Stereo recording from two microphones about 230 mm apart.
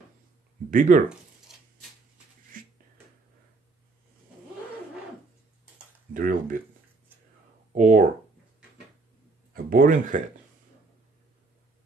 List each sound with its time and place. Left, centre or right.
0.7 s speech: right
1.5 s a sound: centre
2.5 s a sound: right
6.1 s speech: right
7.7 s speech: right
9.5 s speech: right